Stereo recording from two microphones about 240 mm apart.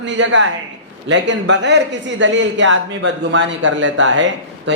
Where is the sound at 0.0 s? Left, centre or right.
Right.